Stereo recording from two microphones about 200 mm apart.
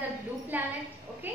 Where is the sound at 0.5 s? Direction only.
10° right (ahead or behind).